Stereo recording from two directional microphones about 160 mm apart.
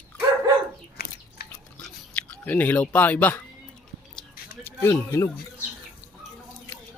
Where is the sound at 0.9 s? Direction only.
75° left (ahead or behind).